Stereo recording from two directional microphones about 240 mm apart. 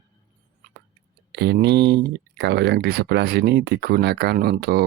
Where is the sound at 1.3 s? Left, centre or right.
Right.